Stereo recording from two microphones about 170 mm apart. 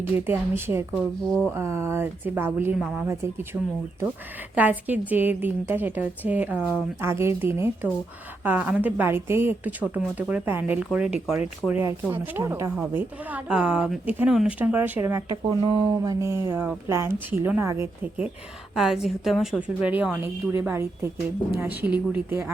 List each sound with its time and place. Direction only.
0.3 s a woman's voice: 15° right (ahead or behind)
15.4 s a woman's voice: 30° right (ahead or behind)
18.7 s a woman's voice: centre (ahead or behind)